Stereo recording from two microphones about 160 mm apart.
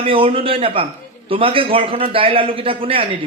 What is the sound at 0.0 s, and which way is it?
A man's voice, 35° right (ahead or behind).